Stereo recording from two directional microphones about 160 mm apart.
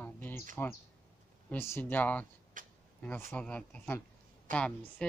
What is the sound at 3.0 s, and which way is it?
Speech, 10° left (ahead or behind).